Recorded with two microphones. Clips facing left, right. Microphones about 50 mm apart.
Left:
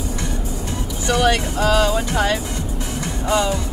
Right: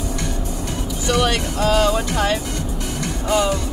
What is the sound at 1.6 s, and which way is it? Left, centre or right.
Speech, left.